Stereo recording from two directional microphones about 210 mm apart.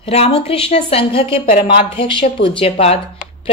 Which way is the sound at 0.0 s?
30° left (ahead or behind).